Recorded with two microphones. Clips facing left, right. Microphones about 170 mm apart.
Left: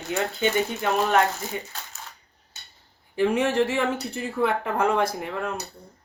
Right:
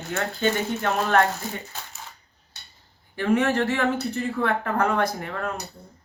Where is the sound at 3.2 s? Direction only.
5° left (ahead or behind).